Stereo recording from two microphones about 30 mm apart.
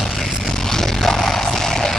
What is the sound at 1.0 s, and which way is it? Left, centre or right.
Music, centre.